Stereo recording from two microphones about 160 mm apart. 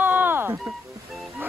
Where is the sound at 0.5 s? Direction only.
Centre (ahead or behind).